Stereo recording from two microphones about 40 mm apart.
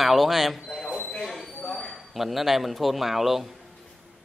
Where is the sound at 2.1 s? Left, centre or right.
Centre.